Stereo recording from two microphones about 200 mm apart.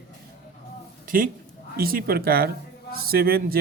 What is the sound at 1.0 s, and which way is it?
Speech, 45° right (ahead or behind).